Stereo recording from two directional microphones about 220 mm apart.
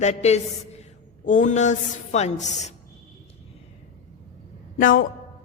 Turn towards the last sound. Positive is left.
turn(degrees=40)  # may be behind; listen again after turning